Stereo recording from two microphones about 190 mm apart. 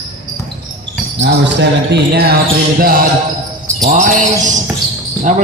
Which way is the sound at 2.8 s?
50° right (ahead or behind).